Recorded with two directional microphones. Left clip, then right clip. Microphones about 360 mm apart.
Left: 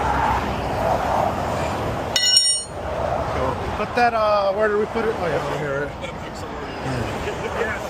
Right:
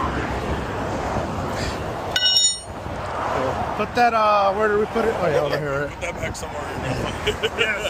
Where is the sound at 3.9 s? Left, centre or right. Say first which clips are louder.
Right 1 dB; centre.